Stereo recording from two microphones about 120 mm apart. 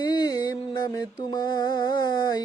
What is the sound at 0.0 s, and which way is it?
Mantra, 35° left (ahead or behind).